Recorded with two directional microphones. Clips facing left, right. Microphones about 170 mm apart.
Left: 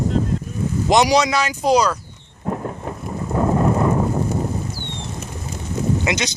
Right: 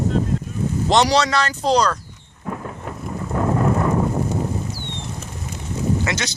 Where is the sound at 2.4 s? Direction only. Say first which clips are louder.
Left 4 dB; 30° left (ahead or behind).